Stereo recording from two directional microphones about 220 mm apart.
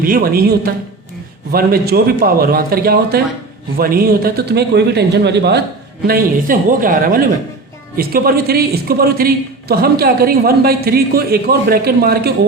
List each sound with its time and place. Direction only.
0.0 s a man's voice: 40° right (ahead or behind)